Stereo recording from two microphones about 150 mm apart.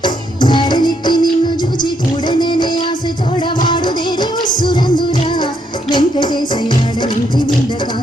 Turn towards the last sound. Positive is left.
turn(degrees=30)  # may be behind; listen again after turning